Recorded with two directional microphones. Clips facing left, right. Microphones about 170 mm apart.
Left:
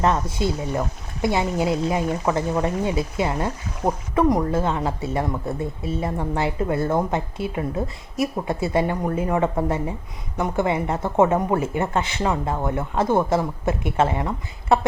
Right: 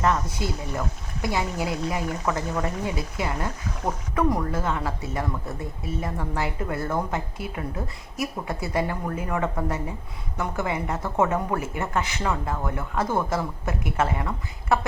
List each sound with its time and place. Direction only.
0.0 s speech: 25° left (ahead or behind)